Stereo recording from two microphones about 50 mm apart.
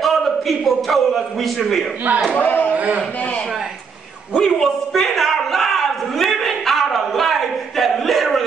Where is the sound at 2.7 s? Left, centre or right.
Right.